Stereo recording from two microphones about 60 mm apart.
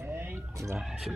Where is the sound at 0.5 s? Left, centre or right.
Right.